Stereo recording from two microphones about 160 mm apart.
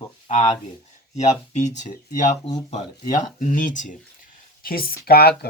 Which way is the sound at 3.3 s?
55° left (ahead or behind).